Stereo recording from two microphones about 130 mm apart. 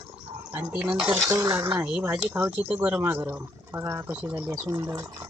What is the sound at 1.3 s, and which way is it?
Speech, 25° right (ahead or behind).